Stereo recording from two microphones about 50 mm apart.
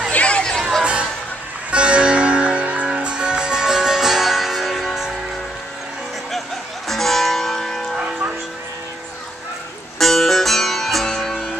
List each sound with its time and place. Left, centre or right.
0.1 s music: left
0.4 s music: centre
1.7 s music: right; by 4.8 s centre
6.9 s music: centre
9.9 s music: centre